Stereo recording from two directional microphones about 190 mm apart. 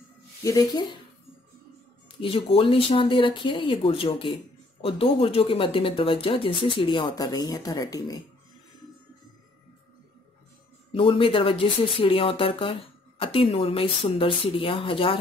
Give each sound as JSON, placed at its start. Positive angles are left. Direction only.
{"t": 0.4, "sound": "speech", "side_deg": 20}
{"t": 2.1, "sound": "speech", "side_deg": 30}
{"t": 10.9, "sound": "speech", "side_deg": 30}